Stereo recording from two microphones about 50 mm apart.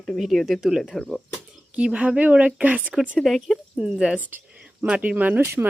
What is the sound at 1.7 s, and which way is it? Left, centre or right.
A woman's voice, right.